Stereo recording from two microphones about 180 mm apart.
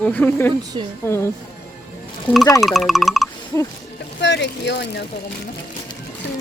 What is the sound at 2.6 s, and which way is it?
Speech, centre (ahead or behind).